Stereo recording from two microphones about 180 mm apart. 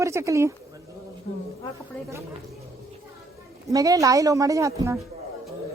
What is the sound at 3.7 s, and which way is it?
A woman's voice, 20° right (ahead or behind).